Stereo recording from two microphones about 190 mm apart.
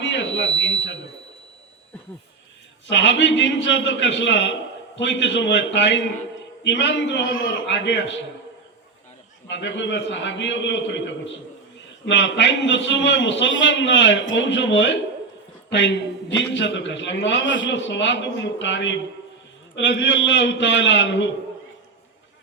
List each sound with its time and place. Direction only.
0.0 s a sound: 70° left (ahead or behind)
2.9 s a man's voice: 75° left (ahead or behind)
9.5 s a man's voice: 70° left (ahead or behind)